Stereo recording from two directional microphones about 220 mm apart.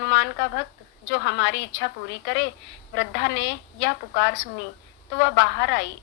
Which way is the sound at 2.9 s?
50° left (ahead or behind).